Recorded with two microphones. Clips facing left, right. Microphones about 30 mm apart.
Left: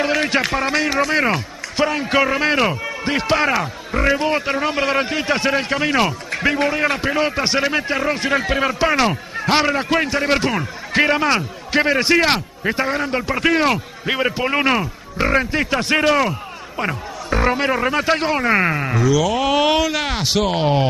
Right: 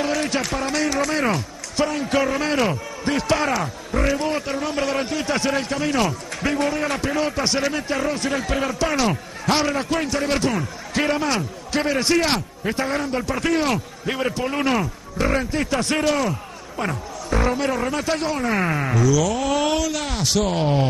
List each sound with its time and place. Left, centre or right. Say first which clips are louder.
0.0 s a man's voice: left 4 dB; left